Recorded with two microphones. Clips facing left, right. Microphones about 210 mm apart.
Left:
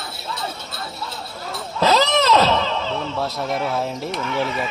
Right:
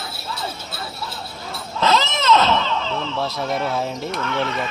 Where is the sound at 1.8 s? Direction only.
35° left (ahead or behind).